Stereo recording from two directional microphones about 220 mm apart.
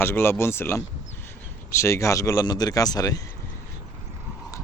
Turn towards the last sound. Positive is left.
turn(degrees=15)  # may be behind; listen again after turning